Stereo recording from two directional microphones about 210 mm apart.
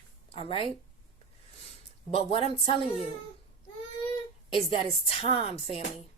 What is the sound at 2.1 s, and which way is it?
Speech, 25° left (ahead or behind).